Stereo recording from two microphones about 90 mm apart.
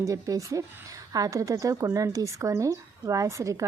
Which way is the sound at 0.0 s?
40° right (ahead or behind).